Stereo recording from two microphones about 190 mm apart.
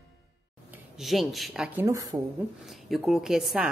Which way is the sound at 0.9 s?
Centre (ahead or behind).